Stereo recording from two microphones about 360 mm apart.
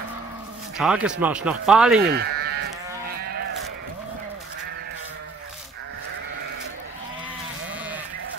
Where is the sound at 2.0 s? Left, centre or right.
Right.